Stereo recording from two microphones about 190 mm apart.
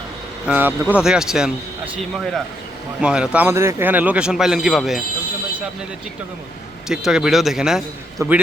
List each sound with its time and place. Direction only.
0.4 s a man's voice: 10° right (ahead or behind)
6.8 s a man's voice: 5° right (ahead or behind)
8.2 s a man's voice: 15° right (ahead or behind)